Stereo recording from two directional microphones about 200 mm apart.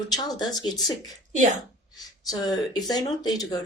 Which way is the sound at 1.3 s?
40° right (ahead or behind).